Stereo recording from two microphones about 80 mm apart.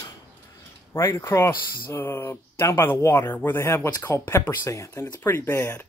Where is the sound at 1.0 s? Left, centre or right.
Left.